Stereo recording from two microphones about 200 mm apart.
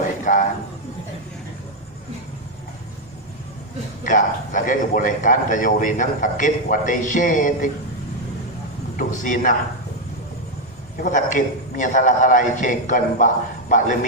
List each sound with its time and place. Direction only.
0.3 s a man's voice: 40° left (ahead or behind)
4.0 s a man's voice: 40° left (ahead or behind)
9.0 s a man's voice: 40° left (ahead or behind)
11.0 s a man's voice: 40° left (ahead or behind)